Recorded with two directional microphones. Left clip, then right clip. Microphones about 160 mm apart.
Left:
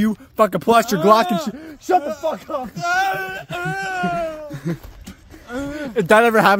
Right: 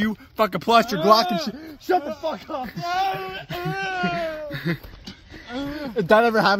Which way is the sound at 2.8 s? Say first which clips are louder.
Left 5 dB; 5° left (ahead or behind).